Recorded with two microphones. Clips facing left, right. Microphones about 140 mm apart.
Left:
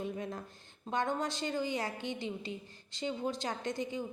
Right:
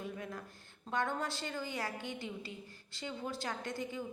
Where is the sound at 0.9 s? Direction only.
20° left (ahead or behind).